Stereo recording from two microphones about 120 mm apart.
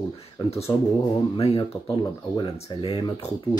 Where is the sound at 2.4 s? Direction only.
45° left (ahead or behind).